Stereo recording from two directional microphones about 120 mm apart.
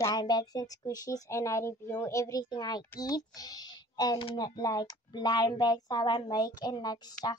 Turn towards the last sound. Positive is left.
turn(degrees=35)  # may be behind; listen again after turning